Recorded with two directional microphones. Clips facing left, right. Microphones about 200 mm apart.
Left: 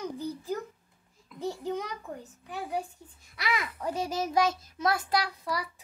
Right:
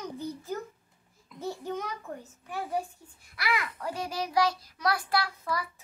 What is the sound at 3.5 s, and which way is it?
A child's voice, 20° left (ahead or behind).